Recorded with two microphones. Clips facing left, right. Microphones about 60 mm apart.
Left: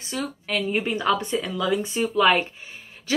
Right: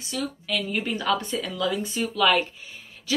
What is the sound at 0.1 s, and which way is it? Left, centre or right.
A woman's voice, left.